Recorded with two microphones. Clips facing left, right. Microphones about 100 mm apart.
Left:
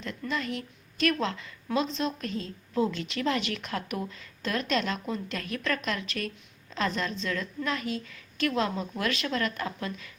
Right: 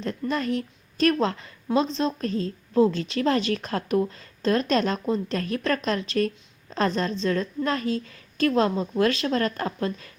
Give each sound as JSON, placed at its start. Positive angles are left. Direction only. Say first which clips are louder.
{"t": 0.0, "sound": "a woman's voice", "louder": "right 6 dB", "side_deg": -40}